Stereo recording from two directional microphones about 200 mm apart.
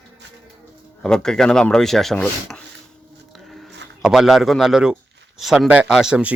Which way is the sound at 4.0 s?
Centre (ahead or behind).